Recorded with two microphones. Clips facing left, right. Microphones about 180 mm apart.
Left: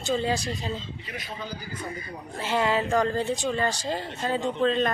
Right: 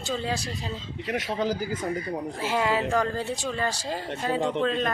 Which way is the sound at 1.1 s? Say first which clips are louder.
Right 11 dB; 80° right.